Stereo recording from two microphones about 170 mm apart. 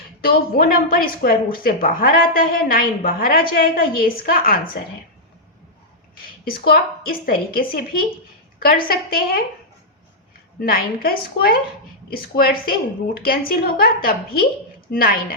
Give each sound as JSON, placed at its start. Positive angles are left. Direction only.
{"t": 0.2, "sound": "speech", "side_deg": 60}
{"t": 6.4, "sound": "speech", "side_deg": 60}
{"t": 10.6, "sound": "speech", "side_deg": 60}